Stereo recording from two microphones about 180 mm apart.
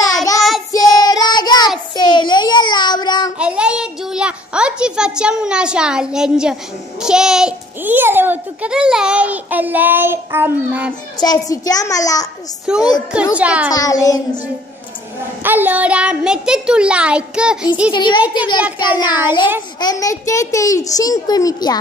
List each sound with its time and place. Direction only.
0.0 s child singing: 20° left (ahead or behind)
3.3 s a child's voice: 5° right (ahead or behind)
11.1 s a child's voice: 20° left (ahead or behind)
12.6 s a child's voice: 5° right (ahead or behind)
13.7 s a child's voice: 20° left (ahead or behind)
15.4 s a child's voice: 10° right (ahead or behind)
17.9 s a child's voice: 25° left (ahead or behind)
19.0 s a child's voice: 10° right (ahead or behind)
19.8 s a child's voice: 20° left (ahead or behind)